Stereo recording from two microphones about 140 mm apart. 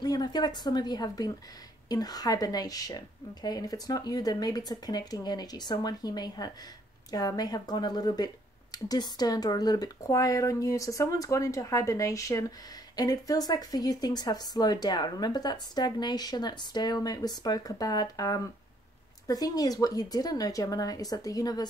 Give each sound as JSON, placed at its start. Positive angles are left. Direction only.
{"t": 0.0, "sound": "speech", "side_deg": 30}